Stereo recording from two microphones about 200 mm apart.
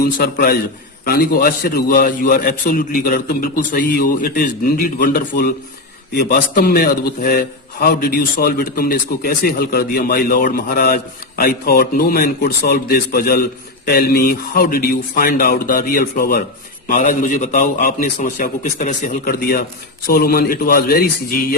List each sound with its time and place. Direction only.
0.0 s a man's voice: 50° left (ahead or behind)
16.9 s a man's voice: 40° left (ahead or behind)